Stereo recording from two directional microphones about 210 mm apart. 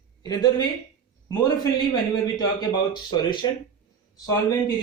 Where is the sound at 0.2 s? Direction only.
20° left (ahead or behind).